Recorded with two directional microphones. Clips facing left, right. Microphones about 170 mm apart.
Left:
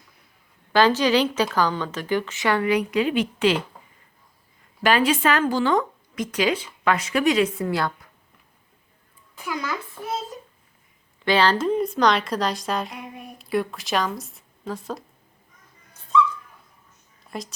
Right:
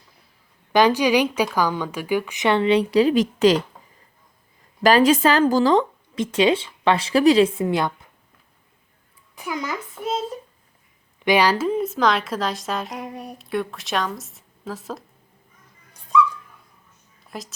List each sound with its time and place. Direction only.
0.7 s a woman's voice: 15° right (ahead or behind); by 3.6 s 40° right (ahead or behind)
4.8 s speech: 40° right (ahead or behind); by 7.9 s 20° right (ahead or behind)
9.3 s a woman's voice: 15° right (ahead or behind)
11.3 s a woman's voice: 10° right (ahead or behind)
12.9 s speech: 40° right (ahead or behind)
13.4 s a woman's voice: centre (ahead or behind)
17.2 s a sound: centre (ahead or behind)